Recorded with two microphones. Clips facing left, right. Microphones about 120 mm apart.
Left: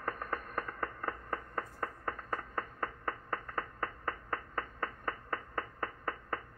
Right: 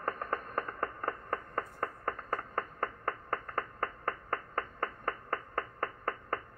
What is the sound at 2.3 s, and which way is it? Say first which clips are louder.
Finger snapping: right 2 dB; 50° right (ahead or behind).